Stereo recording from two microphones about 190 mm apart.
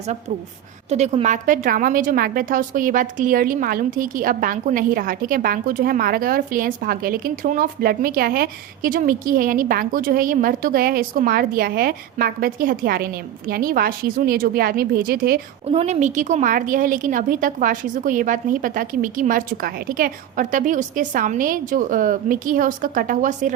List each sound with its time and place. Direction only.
0.9 s a woman's voice: 35° right (ahead or behind); by 15.4 s 50° right (ahead or behind)
15.7 s a woman's voice: 35° right (ahead or behind)